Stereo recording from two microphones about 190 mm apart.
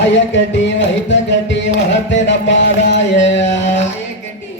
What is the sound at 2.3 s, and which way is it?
Music, 70° left (ahead or behind).